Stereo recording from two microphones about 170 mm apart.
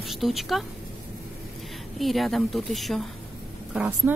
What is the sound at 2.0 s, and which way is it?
A woman's voice, centre (ahead or behind).